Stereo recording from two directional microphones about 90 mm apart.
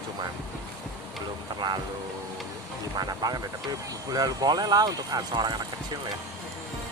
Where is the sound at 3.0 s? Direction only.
45° right (ahead or behind).